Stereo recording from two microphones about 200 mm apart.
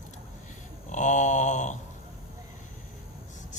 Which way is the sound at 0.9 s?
40° left (ahead or behind).